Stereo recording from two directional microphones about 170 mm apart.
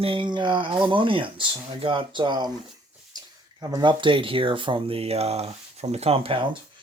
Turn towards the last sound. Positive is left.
turn(degrees=-35)  # may be behind; listen again after turning